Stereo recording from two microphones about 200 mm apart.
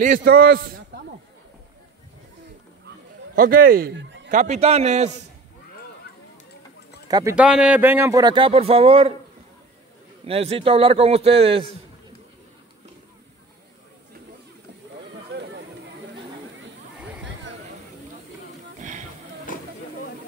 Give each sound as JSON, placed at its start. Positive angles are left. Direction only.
{"t": 0.0, "sound": "a man's voice", "side_deg": -45}
{"t": 3.3, "sound": "speech", "side_deg": -50}
{"t": 4.3, "sound": "a man's voice", "side_deg": -35}
{"t": 7.1, "sound": "speech", "side_deg": -20}
{"t": 7.3, "sound": "speech", "side_deg": -5}
{"t": 10.2, "sound": "speech", "side_deg": -30}
{"t": 18.8, "sound": "music", "side_deg": -40}